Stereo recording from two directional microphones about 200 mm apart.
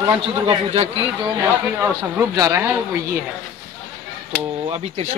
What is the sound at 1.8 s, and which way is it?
Speech, 15° right (ahead or behind).